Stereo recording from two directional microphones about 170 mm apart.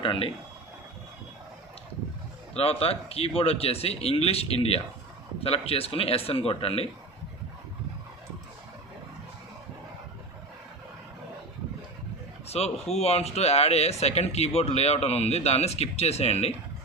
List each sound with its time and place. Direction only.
0.0 s speech: 30° left (ahead or behind)
2.6 s speech: 35° left (ahead or behind)
12.5 s speech: 40° left (ahead or behind)